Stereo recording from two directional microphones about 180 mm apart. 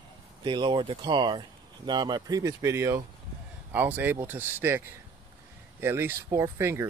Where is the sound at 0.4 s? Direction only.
25° right (ahead or behind).